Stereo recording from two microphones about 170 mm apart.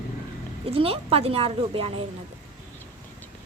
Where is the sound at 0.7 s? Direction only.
35° right (ahead or behind).